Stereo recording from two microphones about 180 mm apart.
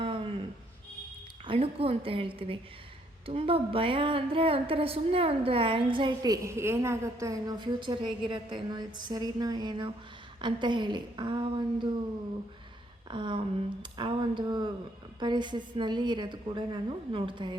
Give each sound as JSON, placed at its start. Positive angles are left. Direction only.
{"t": 0.0, "sound": "a sound", "side_deg": -30}
{"t": 1.5, "sound": "speech", "side_deg": -30}
{"t": 13.1, "sound": "speech", "side_deg": -25}